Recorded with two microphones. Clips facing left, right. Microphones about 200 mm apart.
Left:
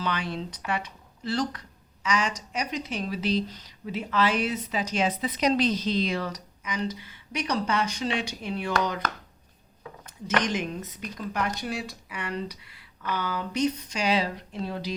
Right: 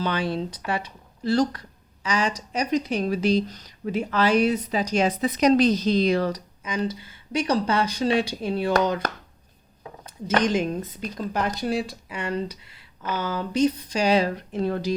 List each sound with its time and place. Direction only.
0.0 s a woman's voice: 35° right (ahead or behind)
10.2 s a woman's voice: 30° right (ahead or behind); by 14.9 s 50° right (ahead or behind)